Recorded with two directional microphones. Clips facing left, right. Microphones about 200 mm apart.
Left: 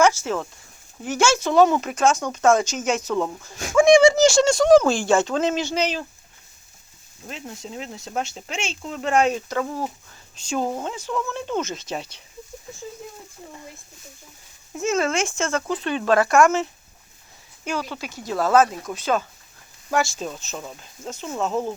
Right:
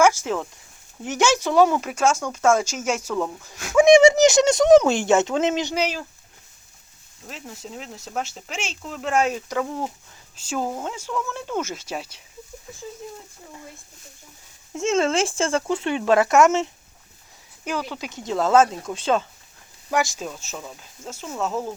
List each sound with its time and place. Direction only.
0.0 s speech: 15° right (ahead or behind)
3.8 s speech: 20° right (ahead or behind)
7.3 s speech: centre (ahead or behind)
14.8 s speech: 25° right (ahead or behind)
17.7 s speech: 15° right (ahead or behind)
19.9 s speech: 15° right (ahead or behind)
20.6 s speech: 5° left (ahead or behind)
21.0 s speech: 5° right (ahead or behind)